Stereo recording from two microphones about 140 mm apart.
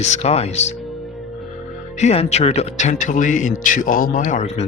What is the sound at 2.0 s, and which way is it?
Speech, 50° left (ahead or behind).